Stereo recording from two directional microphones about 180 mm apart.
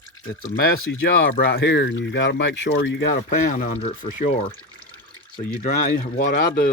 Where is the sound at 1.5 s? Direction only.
80° left.